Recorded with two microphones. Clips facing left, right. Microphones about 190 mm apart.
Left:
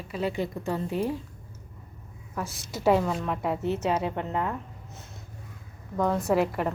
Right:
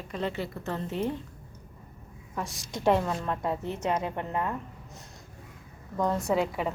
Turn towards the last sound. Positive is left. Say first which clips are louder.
# left 3 dB
turn(degrees=0)  # may be behind; listen again after turning